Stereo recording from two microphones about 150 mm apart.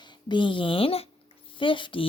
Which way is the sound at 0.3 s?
35° left (ahead or behind).